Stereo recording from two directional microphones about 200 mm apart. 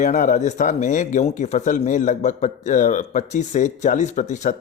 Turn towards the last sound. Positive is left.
turn(degrees=35)  # may be behind; listen again after turning